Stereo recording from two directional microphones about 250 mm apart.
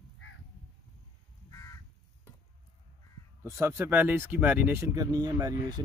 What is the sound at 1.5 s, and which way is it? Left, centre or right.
Crow, centre.